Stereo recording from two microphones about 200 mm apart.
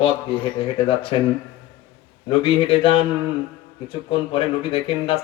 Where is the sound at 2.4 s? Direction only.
25° left (ahead or behind).